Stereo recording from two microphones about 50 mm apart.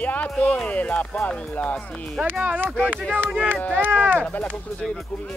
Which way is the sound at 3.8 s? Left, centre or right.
Right.